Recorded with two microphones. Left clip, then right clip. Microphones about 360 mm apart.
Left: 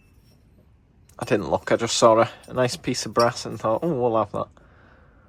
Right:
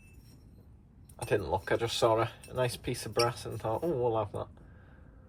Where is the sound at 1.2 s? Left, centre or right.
Left.